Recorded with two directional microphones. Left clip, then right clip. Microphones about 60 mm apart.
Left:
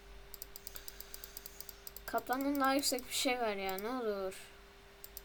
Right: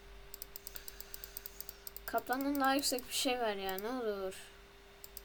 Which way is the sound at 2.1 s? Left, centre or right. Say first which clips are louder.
Even; centre.